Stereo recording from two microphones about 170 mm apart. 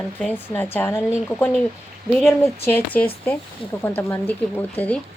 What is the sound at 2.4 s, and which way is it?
A woman's voice, 15° left (ahead or behind).